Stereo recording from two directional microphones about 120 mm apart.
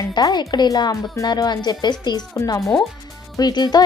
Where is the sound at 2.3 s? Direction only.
25° left (ahead or behind).